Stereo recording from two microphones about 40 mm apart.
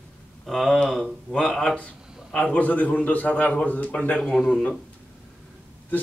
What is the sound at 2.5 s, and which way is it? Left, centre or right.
A man's voice, left.